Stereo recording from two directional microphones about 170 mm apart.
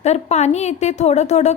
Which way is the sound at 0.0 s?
40° left (ahead or behind).